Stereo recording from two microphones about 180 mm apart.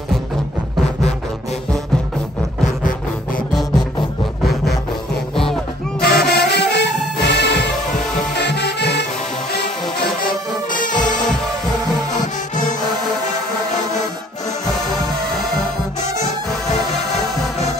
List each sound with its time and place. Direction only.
5.3 s music: centre (ahead or behind)
5.9 s music: 60° left (ahead or behind)
10.2 s music: 50° left (ahead or behind)